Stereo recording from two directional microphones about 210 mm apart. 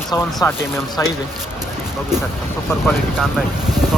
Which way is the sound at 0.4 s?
15° left (ahead or behind).